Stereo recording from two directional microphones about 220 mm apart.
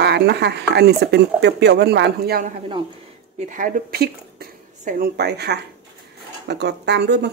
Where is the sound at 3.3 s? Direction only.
35° right (ahead or behind).